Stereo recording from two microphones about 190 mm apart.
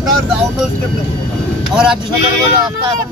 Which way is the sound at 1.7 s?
5° right (ahead or behind).